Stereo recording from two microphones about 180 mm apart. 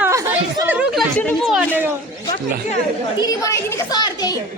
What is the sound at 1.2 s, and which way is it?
Speech, 10° left (ahead or behind).